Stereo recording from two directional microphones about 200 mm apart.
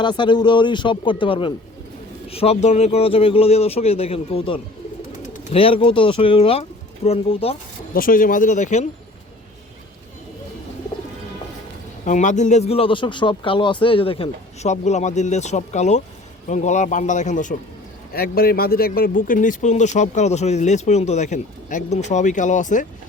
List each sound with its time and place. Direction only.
0.0 s speech: 25° left (ahead or behind)
7.9 s speech: 45° left (ahead or behind)
12.0 s speech: 40° left (ahead or behind)
18.1 s speech: 50° left (ahead or behind)